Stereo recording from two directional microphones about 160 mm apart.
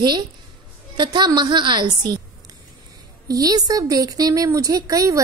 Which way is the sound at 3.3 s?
25° right (ahead or behind).